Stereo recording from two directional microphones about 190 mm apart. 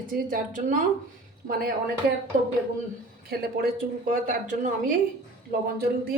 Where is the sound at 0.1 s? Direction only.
45° right (ahead or behind).